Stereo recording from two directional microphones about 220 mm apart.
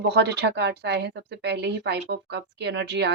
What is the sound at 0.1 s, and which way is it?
A woman's voice, 50° right (ahead or behind).